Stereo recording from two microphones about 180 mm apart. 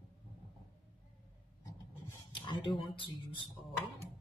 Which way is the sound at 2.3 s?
25° left (ahead or behind).